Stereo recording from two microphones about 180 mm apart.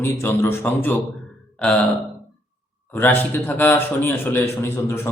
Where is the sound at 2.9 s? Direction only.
10° left (ahead or behind).